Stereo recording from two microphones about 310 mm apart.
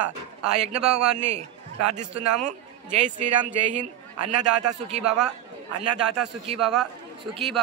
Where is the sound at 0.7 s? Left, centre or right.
Right.